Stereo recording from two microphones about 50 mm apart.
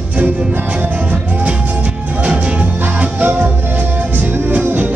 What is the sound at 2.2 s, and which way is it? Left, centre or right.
Music, right.